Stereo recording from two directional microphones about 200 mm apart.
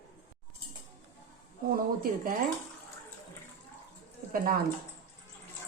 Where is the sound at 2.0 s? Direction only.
45° right (ahead or behind).